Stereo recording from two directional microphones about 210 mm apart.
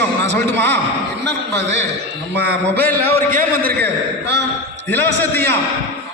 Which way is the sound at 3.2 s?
40° right (ahead or behind).